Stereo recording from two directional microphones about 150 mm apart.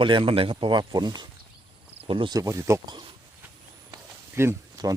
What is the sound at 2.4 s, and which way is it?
Speech, 20° right (ahead or behind).